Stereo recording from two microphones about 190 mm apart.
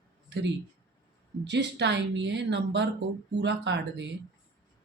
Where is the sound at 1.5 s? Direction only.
65° right (ahead or behind).